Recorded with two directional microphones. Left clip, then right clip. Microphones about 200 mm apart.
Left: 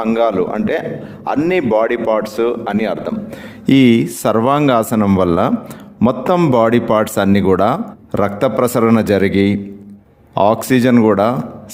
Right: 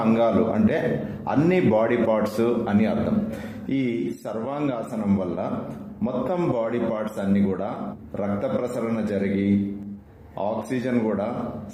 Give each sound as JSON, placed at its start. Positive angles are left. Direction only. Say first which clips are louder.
{"t": 0.0, "sound": "speech", "louder": "left 6 dB", "side_deg": 55}